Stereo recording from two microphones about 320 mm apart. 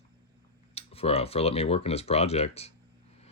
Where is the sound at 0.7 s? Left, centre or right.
Centre.